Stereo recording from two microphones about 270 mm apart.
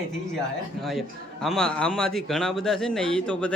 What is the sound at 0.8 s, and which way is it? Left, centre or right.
A man's voice, centre.